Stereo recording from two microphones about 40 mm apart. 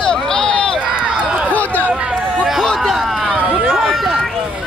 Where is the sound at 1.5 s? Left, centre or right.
Left.